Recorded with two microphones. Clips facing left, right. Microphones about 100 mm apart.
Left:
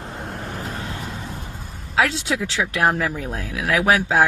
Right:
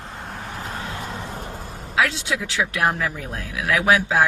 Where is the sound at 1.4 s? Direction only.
85° right.